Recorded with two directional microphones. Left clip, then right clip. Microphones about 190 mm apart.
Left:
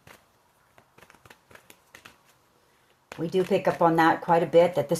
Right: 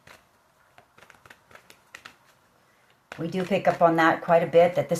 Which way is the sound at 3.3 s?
50° left (ahead or behind).